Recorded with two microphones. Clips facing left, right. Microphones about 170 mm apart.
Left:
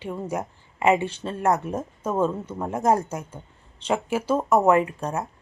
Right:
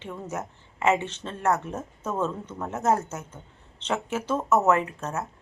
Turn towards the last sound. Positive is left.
turn(degrees=15)  # may be behind; listen again after turning